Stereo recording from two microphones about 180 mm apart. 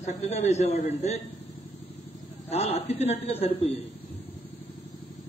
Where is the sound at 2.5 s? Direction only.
35° left (ahead or behind).